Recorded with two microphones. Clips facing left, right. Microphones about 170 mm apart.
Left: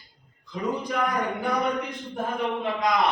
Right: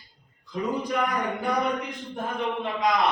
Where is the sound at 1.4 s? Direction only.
Centre (ahead or behind).